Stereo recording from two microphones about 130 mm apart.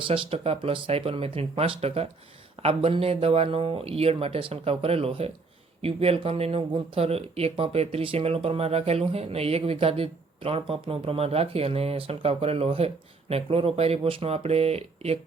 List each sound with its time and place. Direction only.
0.1 s speech: 45° right (ahead or behind)